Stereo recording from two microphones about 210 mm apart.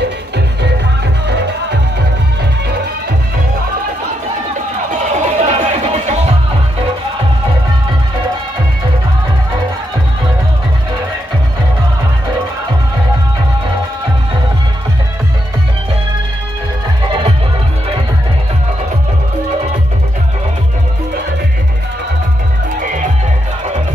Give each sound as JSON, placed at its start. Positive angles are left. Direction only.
{"t": 1.2, "sound": "music", "side_deg": -55}
{"t": 4.9, "sound": "music", "side_deg": -35}